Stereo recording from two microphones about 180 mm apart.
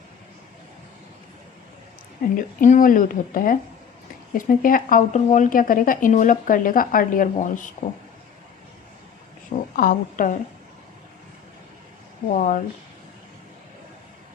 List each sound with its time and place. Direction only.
2.3 s speech: 45° left (ahead or behind)
9.7 s speech: 50° left (ahead or behind)
12.3 s speech: 45° left (ahead or behind)